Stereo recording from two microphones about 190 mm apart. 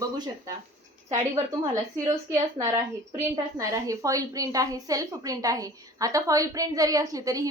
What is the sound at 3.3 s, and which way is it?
A woman's voice, 20° right (ahead or behind).